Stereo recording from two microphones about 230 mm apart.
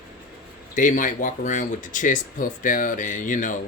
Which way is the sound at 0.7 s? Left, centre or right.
Left.